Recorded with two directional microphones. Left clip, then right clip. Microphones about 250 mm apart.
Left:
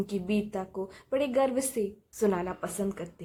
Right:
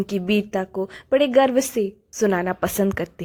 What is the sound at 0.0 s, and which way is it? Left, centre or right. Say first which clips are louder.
A woman's voice: right 9 dB; right.